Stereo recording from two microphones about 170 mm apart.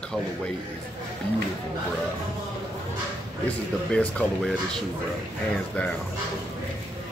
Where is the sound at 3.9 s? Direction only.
5° left (ahead or behind).